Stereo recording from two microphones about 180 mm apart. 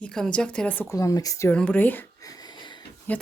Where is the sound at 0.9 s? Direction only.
20° left (ahead or behind).